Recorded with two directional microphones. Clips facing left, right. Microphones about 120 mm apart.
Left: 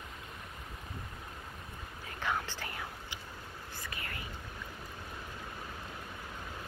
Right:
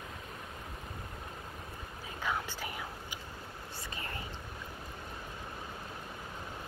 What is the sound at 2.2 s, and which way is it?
Whispering, 15° right (ahead or behind).